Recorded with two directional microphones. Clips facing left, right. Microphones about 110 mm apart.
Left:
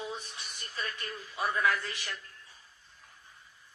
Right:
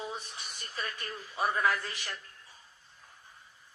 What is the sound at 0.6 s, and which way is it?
A man's voice, 30° right (ahead or behind).